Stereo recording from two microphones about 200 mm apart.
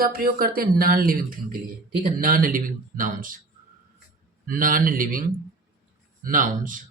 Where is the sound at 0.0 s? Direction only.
45° right (ahead or behind).